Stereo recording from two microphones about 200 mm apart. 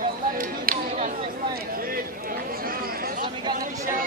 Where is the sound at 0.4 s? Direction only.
45° right (ahead or behind).